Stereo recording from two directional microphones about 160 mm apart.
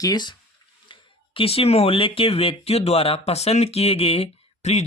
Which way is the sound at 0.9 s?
35° left (ahead or behind).